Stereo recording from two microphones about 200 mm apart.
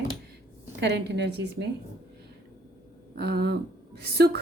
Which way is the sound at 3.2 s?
55° right (ahead or behind).